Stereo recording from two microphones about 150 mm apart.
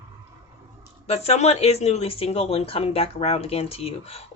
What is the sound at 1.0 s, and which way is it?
A woman's voice, 45° left (ahead or behind).